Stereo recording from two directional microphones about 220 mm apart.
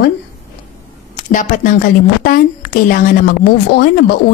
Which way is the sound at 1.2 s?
35° left (ahead or behind).